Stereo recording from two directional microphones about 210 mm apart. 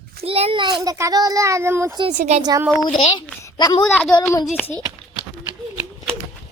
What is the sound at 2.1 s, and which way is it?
Speech, 35° right (ahead or behind).